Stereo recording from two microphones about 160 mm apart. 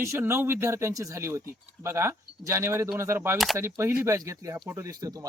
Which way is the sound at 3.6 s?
15° right (ahead or behind).